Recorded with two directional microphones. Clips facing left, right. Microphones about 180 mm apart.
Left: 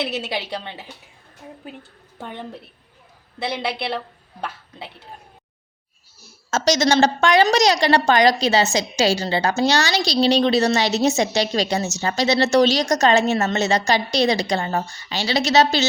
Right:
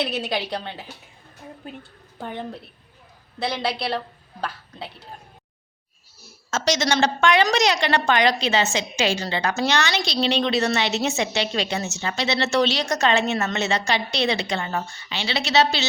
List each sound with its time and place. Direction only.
1.4 s speech: 5° left (ahead or behind)
3.7 s speech: 25° left (ahead or behind)
6.5 s a woman's voice: 40° left (ahead or behind)